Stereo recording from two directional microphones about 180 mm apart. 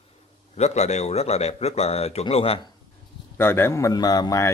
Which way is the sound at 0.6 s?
40° left (ahead or behind).